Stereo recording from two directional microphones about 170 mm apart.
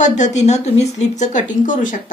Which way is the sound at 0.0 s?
45° left (ahead or behind).